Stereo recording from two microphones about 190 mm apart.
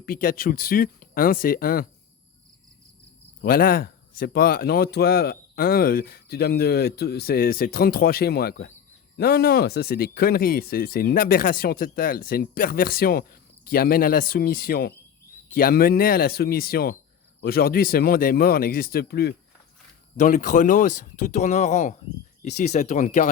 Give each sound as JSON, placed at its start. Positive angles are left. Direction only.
{"t": 0.0, "sound": "speech", "side_deg": 50}
{"t": 3.4, "sound": "speech", "side_deg": 50}
{"t": 20.1, "sound": "speech", "side_deg": 40}